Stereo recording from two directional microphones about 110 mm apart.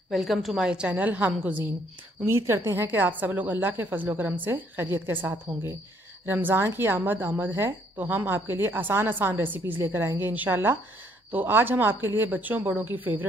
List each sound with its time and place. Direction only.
0.1 s a woman's voice: centre (ahead or behind); by 13.3 s 15° right (ahead or behind)